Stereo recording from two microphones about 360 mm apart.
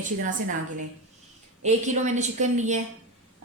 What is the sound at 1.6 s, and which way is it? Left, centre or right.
A woman's voice, centre.